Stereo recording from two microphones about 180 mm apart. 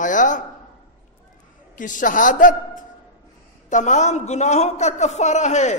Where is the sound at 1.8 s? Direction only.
45° left (ahead or behind).